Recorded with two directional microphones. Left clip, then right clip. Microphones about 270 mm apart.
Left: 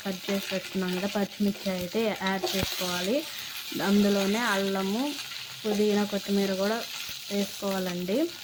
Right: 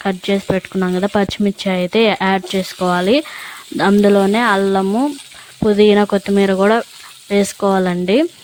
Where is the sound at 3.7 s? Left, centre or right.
Right.